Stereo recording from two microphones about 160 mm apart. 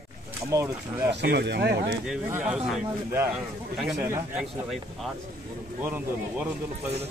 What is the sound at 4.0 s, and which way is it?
Speech, 15° right (ahead or behind).